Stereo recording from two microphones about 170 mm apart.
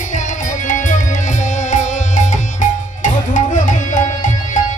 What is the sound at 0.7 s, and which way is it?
Music, 45° left (ahead or behind).